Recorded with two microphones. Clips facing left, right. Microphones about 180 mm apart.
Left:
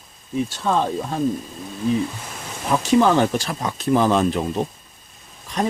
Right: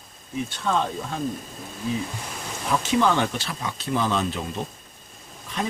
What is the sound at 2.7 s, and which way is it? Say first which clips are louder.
Speech: left 5 dB; 40° left (ahead or behind).